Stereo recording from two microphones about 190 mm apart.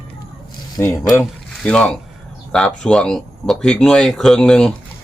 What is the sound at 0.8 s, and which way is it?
A man's voice, 10° left (ahead or behind).